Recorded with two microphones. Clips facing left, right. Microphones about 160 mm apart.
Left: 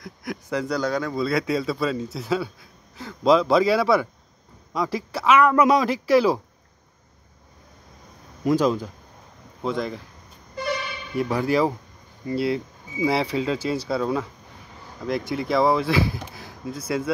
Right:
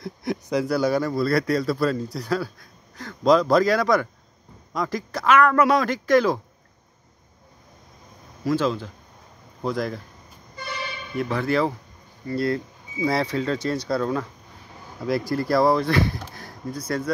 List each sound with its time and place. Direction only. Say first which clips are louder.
0.0 s a sound: right 5 dB; 30° right (ahead or behind)
0.5 s a man's voice: right 3 dB; 10° right (ahead or behind); by 6.4 s 5° left (ahead or behind)
8.5 s a man's voice: left 3 dB; 15° left (ahead or behind)
9.6 s speech: even; centre (ahead or behind)
11.1 s a man's voice: left 1 dB; 10° left (ahead or behind)